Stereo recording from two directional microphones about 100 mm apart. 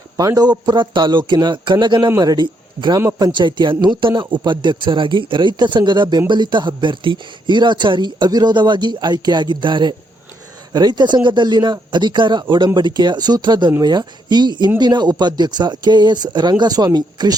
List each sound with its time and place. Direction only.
0.2 s a man's voice: 40° right (ahead or behind)
0.6 s a man's voice: 50° right (ahead or behind)